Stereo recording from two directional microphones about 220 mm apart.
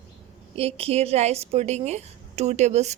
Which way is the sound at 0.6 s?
25° right (ahead or behind).